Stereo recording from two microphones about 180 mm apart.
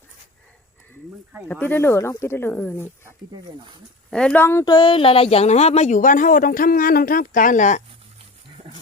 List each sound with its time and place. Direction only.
1.5 s speech: 10° left (ahead or behind)
4.1 s speech: 5° left (ahead or behind); by 7.8 s 45° left (ahead or behind)